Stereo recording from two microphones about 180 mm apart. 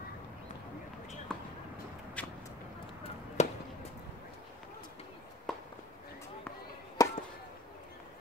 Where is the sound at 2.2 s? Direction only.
10° left (ahead or behind).